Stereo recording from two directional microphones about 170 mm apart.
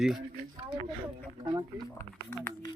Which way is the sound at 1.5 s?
25° right (ahead or behind).